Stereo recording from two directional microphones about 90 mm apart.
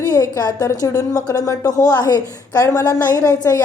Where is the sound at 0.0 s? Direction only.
45° left (ahead or behind).